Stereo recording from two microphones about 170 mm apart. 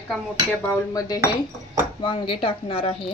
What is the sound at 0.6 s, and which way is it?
Cutlery, 15° left (ahead or behind).